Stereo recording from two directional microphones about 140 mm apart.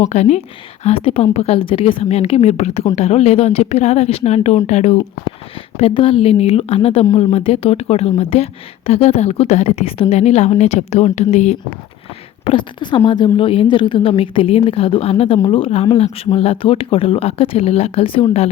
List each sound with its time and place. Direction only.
0.0 s a woman's voice: 55° left (ahead or behind)
5.8 s a woman's voice: 40° left (ahead or behind)
12.5 s a woman's voice: 35° left (ahead or behind)